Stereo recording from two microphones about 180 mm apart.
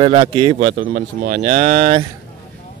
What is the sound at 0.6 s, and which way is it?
Speech, 45° right (ahead or behind).